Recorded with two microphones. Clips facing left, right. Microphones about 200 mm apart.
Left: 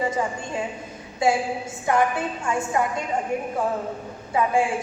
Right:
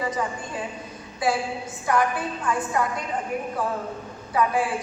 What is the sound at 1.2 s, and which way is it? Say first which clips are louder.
A woman's voice: left 3 dB; 25° left (ahead or behind).